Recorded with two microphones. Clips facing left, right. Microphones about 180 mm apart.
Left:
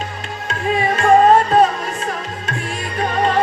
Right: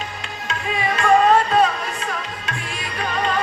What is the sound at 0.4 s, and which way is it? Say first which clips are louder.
Music: left 5 dB; 45° left (ahead or behind).